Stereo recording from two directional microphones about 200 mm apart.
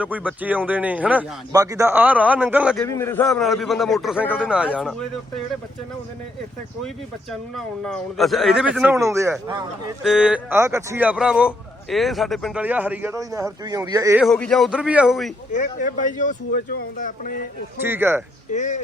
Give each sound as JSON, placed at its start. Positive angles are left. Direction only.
{"t": 0.0, "sound": "a man's voice", "side_deg": -5}
{"t": 2.7, "sound": "speech", "side_deg": 10}
{"t": 4.4, "sound": "speech", "side_deg": -5}
{"t": 7.5, "sound": "speech", "side_deg": 0}
{"t": 10.0, "sound": "a man's voice", "side_deg": -5}
{"t": 14.2, "sound": "speech", "side_deg": 5}
{"t": 15.5, "sound": "speech", "side_deg": 40}
{"t": 17.8, "sound": "a man's voice", "side_deg": -10}
{"t": 18.5, "sound": "speech", "side_deg": 35}